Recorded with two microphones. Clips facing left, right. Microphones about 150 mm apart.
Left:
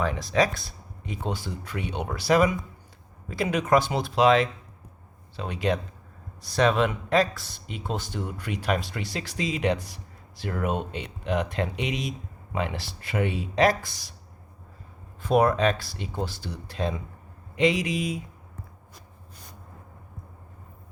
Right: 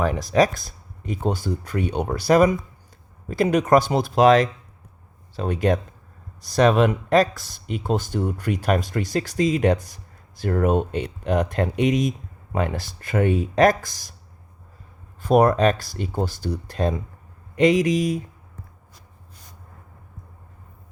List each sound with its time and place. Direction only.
0.0 s speech: 45° right (ahead or behind)
15.2 s speech: 45° right (ahead or behind)